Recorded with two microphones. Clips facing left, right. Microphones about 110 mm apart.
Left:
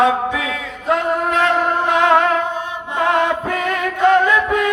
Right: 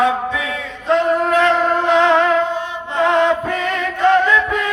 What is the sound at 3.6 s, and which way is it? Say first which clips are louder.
Music: left 1 dB; 15° left (ahead or behind).